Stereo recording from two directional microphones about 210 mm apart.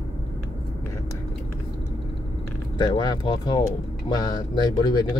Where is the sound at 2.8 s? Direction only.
20° left (ahead or behind).